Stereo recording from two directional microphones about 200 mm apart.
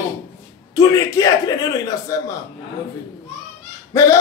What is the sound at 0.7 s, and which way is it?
Speech, 15° left (ahead or behind).